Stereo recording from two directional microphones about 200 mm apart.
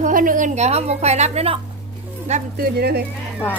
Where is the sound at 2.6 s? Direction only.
50° right (ahead or behind).